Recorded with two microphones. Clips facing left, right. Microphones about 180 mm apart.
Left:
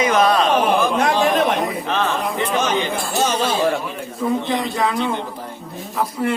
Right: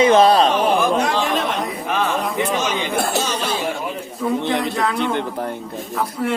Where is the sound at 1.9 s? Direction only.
10° right (ahead or behind).